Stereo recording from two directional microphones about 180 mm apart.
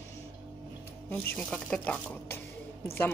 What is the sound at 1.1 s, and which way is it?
Speech, 5° left (ahead or behind).